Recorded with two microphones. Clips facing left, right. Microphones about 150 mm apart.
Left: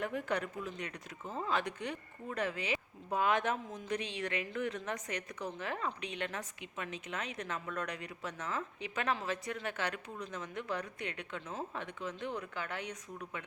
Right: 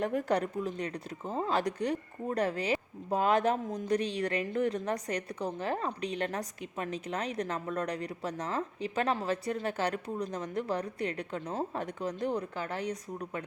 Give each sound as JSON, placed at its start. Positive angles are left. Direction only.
{"t": 0.0, "sound": "a woman's voice", "side_deg": -40}